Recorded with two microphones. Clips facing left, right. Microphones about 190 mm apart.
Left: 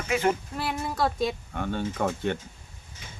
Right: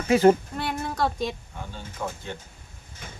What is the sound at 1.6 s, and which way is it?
Speech, 65° left (ahead or behind).